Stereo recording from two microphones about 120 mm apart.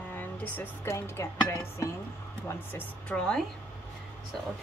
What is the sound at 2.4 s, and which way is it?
Speech, 15° left (ahead or behind).